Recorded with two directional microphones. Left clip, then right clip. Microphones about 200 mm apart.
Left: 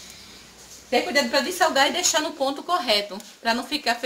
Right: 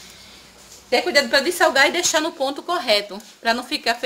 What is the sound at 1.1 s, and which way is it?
A woman's voice, 45° right (ahead or behind).